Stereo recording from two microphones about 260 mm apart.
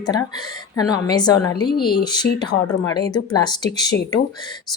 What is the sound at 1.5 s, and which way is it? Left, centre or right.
Speech, left.